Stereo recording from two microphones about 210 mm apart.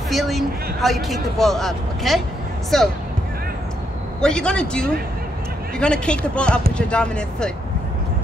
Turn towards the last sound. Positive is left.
turn(degrees=5)  # may be behind; listen again after turning